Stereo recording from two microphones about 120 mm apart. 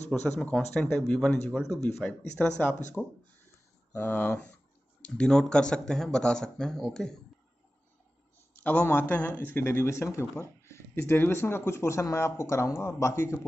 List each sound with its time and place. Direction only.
0.4 s speech: 5° left (ahead or behind)
3.9 s speech: 15° left (ahead or behind)
8.5 s speech: 15° left (ahead or behind)